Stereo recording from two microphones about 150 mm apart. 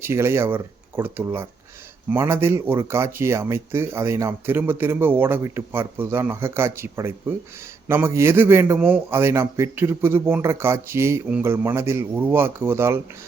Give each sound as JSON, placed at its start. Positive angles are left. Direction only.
{"t": 0.0, "sound": "speech", "side_deg": -15}